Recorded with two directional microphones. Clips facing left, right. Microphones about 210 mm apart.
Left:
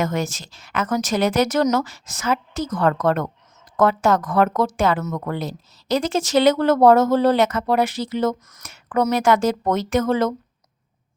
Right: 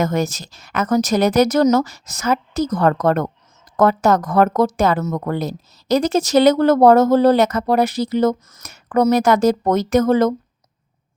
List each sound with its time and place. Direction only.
0.0 s speech: 40° right (ahead or behind)